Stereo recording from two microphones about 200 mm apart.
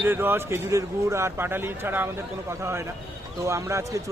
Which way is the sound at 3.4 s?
15° right (ahead or behind).